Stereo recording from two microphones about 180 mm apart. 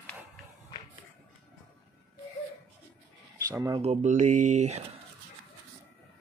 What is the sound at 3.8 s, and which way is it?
Speech, 40° right (ahead or behind).